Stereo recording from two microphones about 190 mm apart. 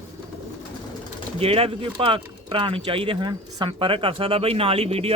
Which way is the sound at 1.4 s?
30° right (ahead or behind).